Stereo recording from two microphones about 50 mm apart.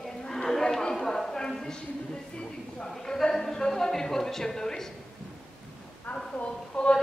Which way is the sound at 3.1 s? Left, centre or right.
Centre.